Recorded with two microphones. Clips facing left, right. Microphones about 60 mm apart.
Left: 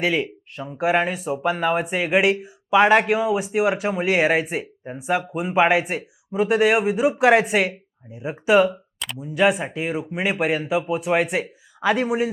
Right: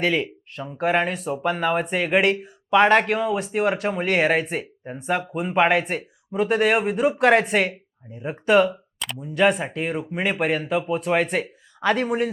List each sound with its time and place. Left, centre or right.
0.0 s speech: centre